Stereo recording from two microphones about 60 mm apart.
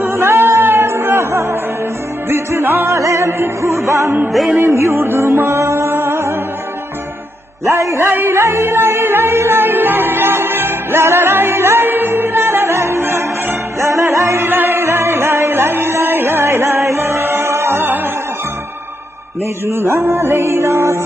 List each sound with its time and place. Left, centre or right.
0.0 s music: right
3.0 s music: right
4.3 s music: centre
4.6 s music: right
7.7 s music: right
8.0 s music: right
19.6 s music: right